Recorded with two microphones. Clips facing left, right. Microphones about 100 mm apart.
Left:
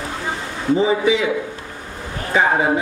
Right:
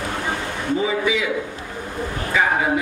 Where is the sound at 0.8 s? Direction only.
30° left (ahead or behind).